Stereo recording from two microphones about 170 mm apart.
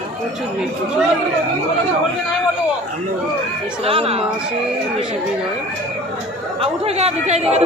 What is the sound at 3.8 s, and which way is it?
Speech, 35° right (ahead or behind).